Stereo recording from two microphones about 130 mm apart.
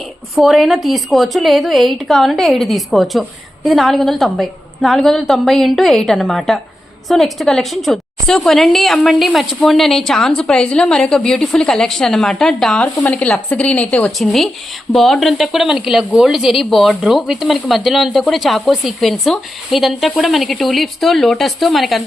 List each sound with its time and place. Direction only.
0.3 s a woman's voice: centre (ahead or behind)